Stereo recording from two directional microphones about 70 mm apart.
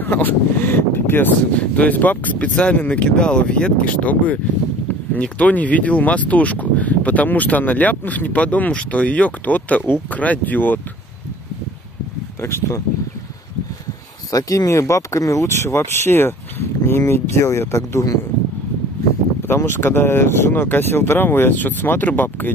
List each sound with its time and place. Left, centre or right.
0.0 s speech: left
12.4 s speech: left
14.3 s speech: left
19.4 s speech: left